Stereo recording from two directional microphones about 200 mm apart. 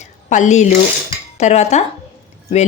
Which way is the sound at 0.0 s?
35° left (ahead or behind).